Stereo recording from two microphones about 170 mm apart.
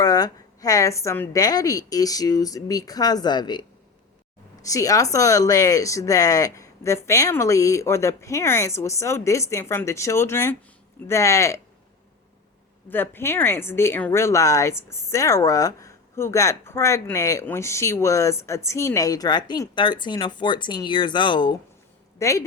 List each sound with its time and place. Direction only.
0.0 s a woman's voice: 20° left (ahead or behind)
12.9 s speech: 10° left (ahead or behind); by 21.5 s 30° left (ahead or behind)
22.2 s speech: 20° left (ahead or behind)